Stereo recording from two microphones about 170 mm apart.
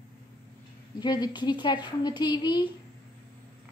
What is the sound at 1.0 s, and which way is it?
A woman's voice, 25° left (ahead or behind).